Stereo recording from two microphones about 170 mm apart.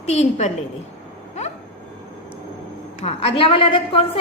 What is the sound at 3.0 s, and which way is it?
A woman's voice, 35° left (ahead or behind).